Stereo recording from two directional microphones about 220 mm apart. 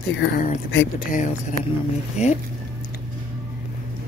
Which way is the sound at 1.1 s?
35° left (ahead or behind).